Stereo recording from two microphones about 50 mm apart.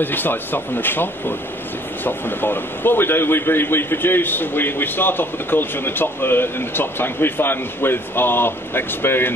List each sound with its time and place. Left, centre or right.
0.0 s a man's voice: left